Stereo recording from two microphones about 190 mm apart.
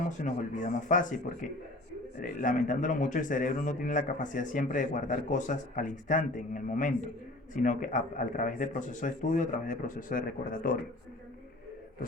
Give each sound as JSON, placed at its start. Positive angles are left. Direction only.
{"t": 0.2, "sound": "a man's voice", "side_deg": 40}